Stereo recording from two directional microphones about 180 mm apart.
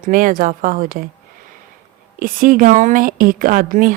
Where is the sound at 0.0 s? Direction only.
50° right (ahead or behind).